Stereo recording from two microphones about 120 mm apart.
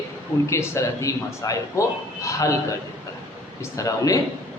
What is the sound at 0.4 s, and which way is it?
A man's voice, 25° left (ahead or behind).